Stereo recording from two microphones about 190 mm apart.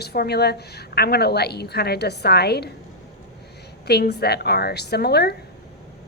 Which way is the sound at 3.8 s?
55° left (ahead or behind).